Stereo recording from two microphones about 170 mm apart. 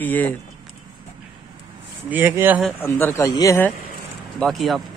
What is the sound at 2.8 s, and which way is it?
Speech, 15° left (ahead or behind).